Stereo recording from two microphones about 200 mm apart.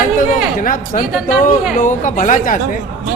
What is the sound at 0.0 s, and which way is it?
A man's voice, 45° left (ahead or behind).